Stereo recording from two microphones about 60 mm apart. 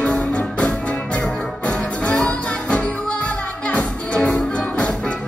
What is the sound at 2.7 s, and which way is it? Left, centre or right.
Music, centre.